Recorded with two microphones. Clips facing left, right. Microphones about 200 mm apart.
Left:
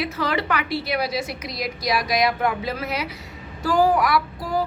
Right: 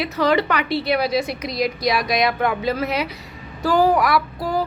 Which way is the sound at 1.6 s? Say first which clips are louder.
Right 4 dB; 65° right (ahead or behind).